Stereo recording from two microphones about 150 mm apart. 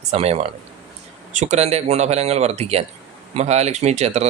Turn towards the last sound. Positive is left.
turn(degrees=-45)  # may be behind; listen again after turning